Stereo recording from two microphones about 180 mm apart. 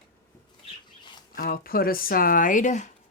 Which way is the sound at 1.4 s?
55° left (ahead or behind).